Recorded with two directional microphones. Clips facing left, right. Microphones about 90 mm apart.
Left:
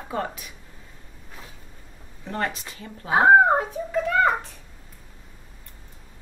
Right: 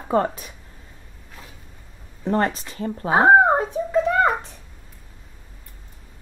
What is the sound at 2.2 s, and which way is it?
Speech, 35° right (ahead or behind).